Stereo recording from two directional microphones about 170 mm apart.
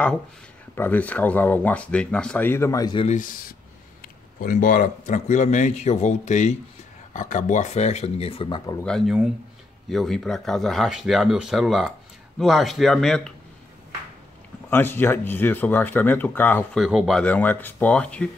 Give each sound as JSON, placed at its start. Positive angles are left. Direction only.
{"t": 0.7, "sound": "speech", "side_deg": 10}
{"t": 3.1, "sound": "a man's voice", "side_deg": 50}
{"t": 8.8, "sound": "speech", "side_deg": 0}
{"t": 14.7, "sound": "speech", "side_deg": 15}
{"t": 16.8, "sound": "speech", "side_deg": 0}